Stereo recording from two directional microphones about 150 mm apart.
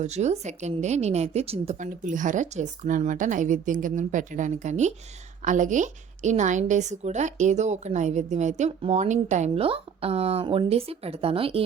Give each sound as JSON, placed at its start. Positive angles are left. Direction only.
{"t": 0.0, "sound": "a woman's voice", "side_deg": -50}